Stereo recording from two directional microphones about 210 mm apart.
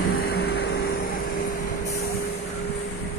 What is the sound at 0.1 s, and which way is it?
Vehicle, 45° left (ahead or behind).